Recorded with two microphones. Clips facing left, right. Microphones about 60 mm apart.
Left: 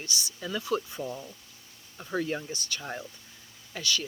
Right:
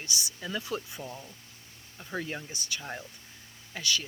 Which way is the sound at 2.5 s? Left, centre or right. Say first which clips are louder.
Left 2 dB; right.